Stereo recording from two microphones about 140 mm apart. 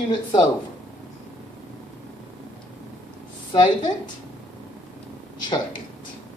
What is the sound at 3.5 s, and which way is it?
Speech, 30° left (ahead or behind).